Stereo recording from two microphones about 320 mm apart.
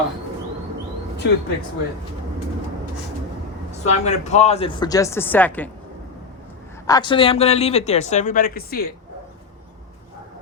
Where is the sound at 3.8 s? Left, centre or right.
Left; by 5.7 s centre.